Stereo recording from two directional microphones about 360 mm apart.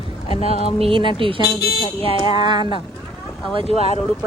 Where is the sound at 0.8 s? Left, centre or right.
Centre.